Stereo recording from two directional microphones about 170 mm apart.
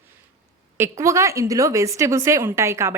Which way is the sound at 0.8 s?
15° right (ahead or behind).